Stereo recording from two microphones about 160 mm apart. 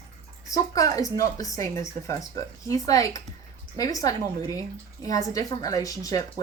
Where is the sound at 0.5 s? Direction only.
20° left (ahead or behind).